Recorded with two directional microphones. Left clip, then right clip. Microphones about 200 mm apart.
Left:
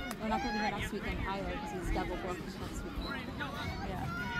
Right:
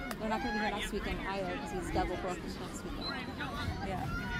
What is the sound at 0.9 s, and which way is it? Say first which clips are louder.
Speech: right 1 dB; centre (ahead or behind).